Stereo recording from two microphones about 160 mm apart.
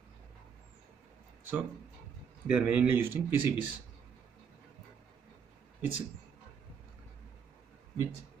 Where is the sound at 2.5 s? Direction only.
10° right (ahead or behind).